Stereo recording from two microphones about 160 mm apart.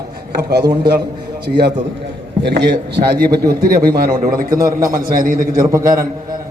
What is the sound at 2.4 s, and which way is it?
A man's voice, 90° right.